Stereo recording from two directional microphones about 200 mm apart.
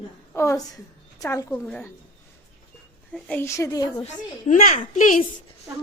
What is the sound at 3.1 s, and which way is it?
Speech, 10° left (ahead or behind).